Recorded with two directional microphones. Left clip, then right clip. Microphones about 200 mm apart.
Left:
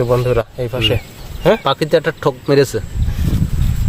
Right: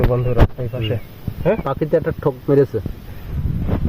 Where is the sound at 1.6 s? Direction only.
Centre (ahead or behind).